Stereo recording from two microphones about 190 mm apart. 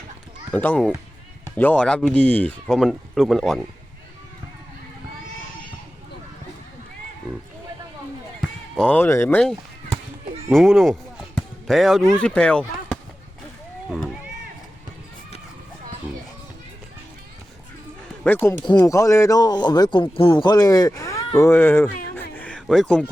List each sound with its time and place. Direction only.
0.5 s speech: 10° left (ahead or behind)
8.4 s basketball bounce: centre (ahead or behind)
9.4 s a sound: centre (ahead or behind)
10.5 s speech: centre (ahead or behind)
18.2 s speech: 10° left (ahead or behind)
22.1 s a sound: 10° left (ahead or behind)